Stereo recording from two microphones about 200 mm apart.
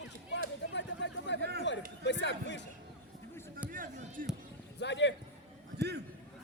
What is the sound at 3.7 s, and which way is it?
Basketball bounce, 45° right (ahead or behind).